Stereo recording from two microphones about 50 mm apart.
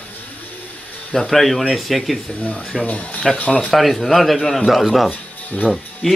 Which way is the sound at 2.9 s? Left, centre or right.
Left.